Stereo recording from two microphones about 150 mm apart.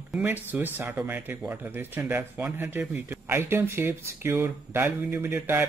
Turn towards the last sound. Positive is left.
turn(degrees=-15)  # may be behind; listen again after turning